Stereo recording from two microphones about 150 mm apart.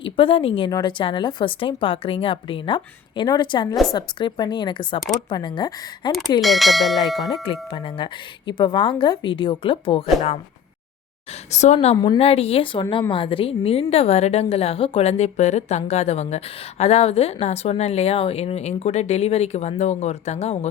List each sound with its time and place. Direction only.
0.0 s a woman's voice: 35° left (ahead or behind)
6.4 s speech: centre (ahead or behind)
7.4 s speech: 35° left (ahead or behind)
11.5 s a woman's voice: 50° left (ahead or behind)
11.9 s speech: 30° left (ahead or behind)
12.2 s a woman's voice: 40° left (ahead or behind)